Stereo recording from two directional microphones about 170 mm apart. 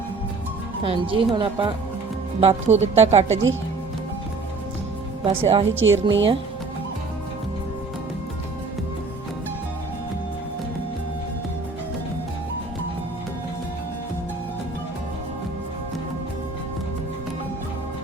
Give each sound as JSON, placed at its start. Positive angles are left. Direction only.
{"t": 0.8, "sound": "speech", "side_deg": -30}
{"t": 5.2, "sound": "speech", "side_deg": -35}
{"t": 5.6, "sound": "speech", "side_deg": -90}